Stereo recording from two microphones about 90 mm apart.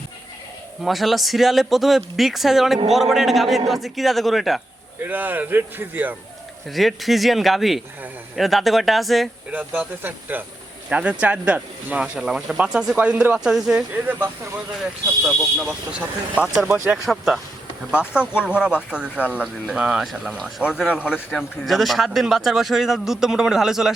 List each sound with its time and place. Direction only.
0.8 s a man's voice: centre (ahead or behind)
5.0 s speech: 20° right (ahead or behind)
6.7 s a man's voice: centre (ahead or behind)
9.5 s speech: 20° right (ahead or behind)
13.9 s speech: 20° right (ahead or behind)
15.3 s speech: 5° right (ahead or behind)
17.1 s a man's voice: centre (ahead or behind)
17.9 s a man's voice: 10° right (ahead or behind)